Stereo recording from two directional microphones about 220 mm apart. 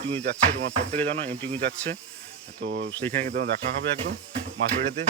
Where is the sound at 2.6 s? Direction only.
50° right (ahead or behind).